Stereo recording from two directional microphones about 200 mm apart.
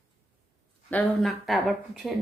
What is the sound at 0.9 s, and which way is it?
A woman's voice, 5° left (ahead or behind).